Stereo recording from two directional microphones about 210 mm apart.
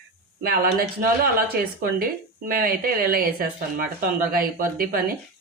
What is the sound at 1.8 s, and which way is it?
Speech, 45° right (ahead or behind).